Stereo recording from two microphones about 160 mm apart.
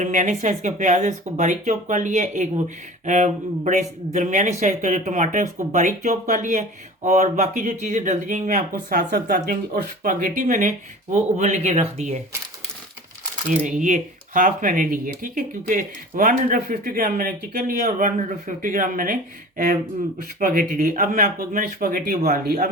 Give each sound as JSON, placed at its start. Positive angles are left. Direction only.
{"t": 0.0, "sound": "speech", "side_deg": -50}
{"t": 13.5, "sound": "speech", "side_deg": -50}
{"t": 16.8, "sound": "speech", "side_deg": -70}
{"t": 18.2, "sound": "speech", "side_deg": -50}
{"t": 20.4, "sound": "speech", "side_deg": -55}